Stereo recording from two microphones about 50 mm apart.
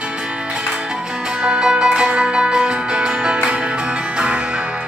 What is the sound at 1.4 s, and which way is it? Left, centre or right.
Music, centre.